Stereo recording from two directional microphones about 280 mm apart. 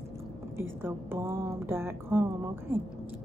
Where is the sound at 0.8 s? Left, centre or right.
Centre.